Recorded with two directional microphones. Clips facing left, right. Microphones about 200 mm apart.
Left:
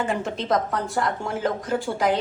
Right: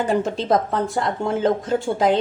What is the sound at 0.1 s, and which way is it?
Speech, 30° right (ahead or behind).